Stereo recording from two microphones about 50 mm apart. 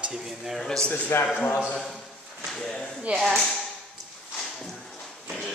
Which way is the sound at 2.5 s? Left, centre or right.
Centre.